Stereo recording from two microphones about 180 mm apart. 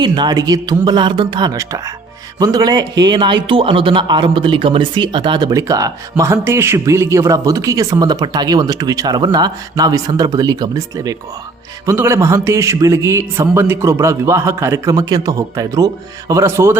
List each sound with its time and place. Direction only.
0.0 s a man's voice: 25° right (ahead or behind)